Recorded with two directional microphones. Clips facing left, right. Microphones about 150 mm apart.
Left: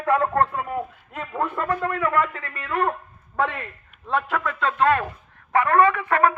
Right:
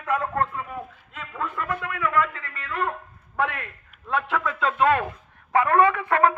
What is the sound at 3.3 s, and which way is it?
Speech, 15° left (ahead or behind).